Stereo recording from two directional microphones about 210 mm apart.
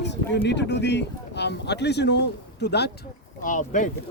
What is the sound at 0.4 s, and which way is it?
Speech, 55° left (ahead or behind).